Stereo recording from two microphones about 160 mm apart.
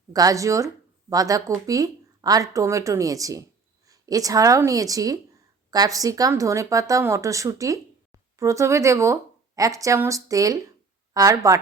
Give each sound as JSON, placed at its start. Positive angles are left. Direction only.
{"t": 0.1, "sound": "a woman's voice", "side_deg": -20}